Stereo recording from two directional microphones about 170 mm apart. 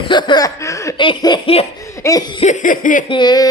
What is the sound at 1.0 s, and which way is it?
Speech, 30° left (ahead or behind).